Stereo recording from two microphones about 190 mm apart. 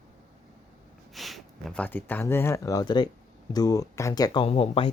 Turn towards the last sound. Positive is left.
turn(degrees=30)  # may be behind; listen again after turning